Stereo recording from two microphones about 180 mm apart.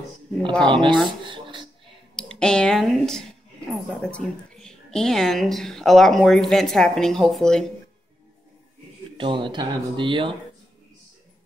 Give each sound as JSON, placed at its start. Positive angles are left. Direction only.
{"t": 0.5, "sound": "a woman's voice", "side_deg": 5}
{"t": 1.0, "sound": "speech", "side_deg": -25}
{"t": 2.1, "sound": "a woman's voice", "side_deg": 5}
{"t": 9.1, "sound": "speech", "side_deg": -25}